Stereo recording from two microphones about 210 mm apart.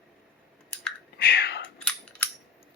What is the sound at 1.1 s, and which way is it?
Whispering, 50° left (ahead or behind).